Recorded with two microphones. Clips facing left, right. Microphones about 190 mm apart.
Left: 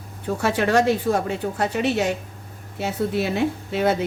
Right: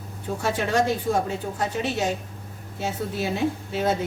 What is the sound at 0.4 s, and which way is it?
A woman's voice, 70° left (ahead or behind).